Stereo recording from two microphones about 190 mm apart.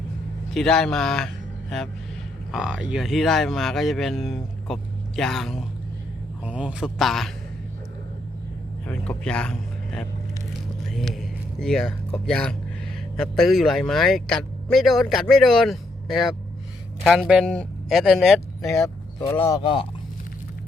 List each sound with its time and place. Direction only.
0.5 s speech: centre (ahead or behind)
2.5 s speech: 5° right (ahead or behind)
8.9 s speech: 5° left (ahead or behind)
18.7 s speech: 15° left (ahead or behind)